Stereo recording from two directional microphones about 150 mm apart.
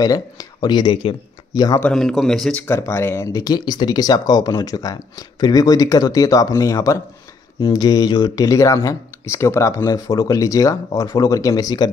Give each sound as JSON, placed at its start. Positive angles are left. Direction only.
{"t": 0.0, "sound": "speech", "side_deg": 25}
{"t": 1.8, "sound": "a man's voice", "side_deg": 5}
{"t": 2.6, "sound": "speech", "side_deg": 15}